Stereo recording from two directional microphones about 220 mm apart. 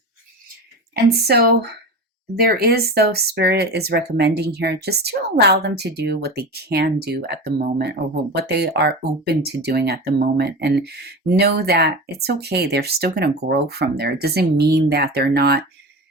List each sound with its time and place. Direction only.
1.3 s speech: 45° right (ahead or behind)